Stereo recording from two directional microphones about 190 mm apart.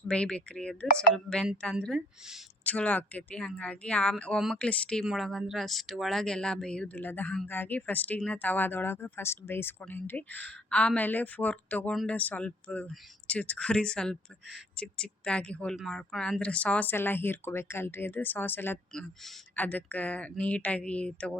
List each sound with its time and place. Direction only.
0.1 s speech: 5° left (ahead or behind)